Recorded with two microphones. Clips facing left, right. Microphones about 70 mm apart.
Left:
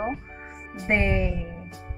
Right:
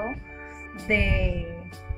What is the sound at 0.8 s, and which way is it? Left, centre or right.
Speech, left.